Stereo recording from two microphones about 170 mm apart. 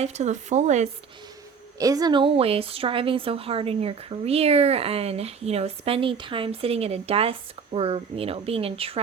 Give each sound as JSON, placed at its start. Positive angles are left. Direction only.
{"t": 0.0, "sound": "speech", "side_deg": -40}
{"t": 1.8, "sound": "a woman's voice", "side_deg": -20}